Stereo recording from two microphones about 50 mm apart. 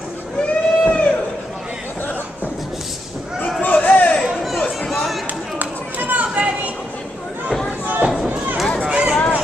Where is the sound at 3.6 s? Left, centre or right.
Left.